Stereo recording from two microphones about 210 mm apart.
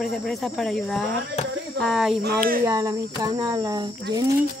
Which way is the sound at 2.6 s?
15° right (ahead or behind).